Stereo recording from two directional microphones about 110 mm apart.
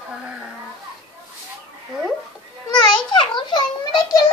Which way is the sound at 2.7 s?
45° left (ahead or behind).